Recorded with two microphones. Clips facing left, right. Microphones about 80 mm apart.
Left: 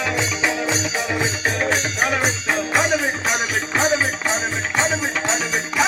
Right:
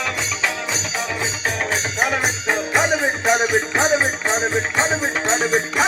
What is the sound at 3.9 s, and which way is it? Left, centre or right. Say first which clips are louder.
Music: right 2 dB; right.